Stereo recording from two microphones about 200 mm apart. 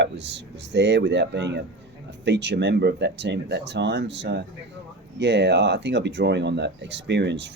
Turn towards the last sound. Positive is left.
turn(degrees=-60)  # may be behind; listen again after turning